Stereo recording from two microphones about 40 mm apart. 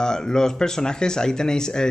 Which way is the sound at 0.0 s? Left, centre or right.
Centre.